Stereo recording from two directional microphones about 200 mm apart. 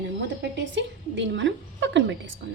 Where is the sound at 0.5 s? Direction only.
65° right (ahead or behind).